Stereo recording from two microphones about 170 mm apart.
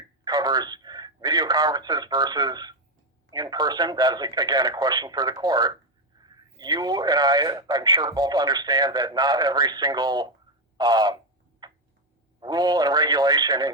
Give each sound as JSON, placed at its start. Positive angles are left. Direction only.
{"t": 0.3, "sound": "a man's voice", "side_deg": -25}
{"t": 10.8, "sound": "frog", "side_deg": -25}
{"t": 11.6, "sound": "tick-tock", "side_deg": -25}
{"t": 12.4, "sound": "speech", "side_deg": -25}